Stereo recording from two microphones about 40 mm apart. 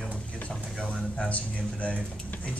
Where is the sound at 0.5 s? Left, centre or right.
Centre.